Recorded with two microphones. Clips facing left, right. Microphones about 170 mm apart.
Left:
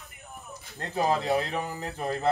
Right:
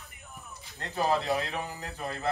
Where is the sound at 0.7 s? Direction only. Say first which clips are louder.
Left 2 dB; 40° left (ahead or behind).